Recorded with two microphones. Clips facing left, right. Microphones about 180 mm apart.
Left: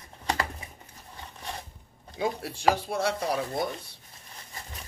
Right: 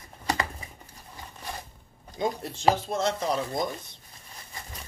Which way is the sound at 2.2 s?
10° left (ahead or behind).